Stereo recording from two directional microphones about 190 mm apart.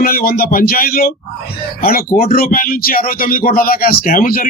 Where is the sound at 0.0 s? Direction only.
50° left (ahead or behind).